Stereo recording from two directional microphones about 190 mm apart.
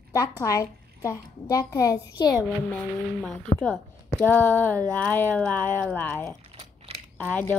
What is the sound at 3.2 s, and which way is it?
A woman's voice, 5° left (ahead or behind).